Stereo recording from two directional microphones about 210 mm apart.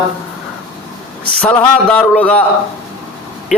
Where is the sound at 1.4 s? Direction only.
5° left (ahead or behind).